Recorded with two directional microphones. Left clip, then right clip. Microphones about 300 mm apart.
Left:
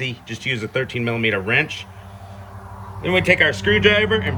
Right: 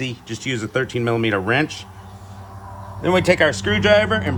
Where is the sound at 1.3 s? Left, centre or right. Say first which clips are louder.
Left 3 dB; centre.